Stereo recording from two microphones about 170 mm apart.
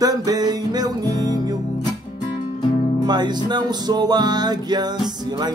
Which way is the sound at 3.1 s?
25° right (ahead or behind).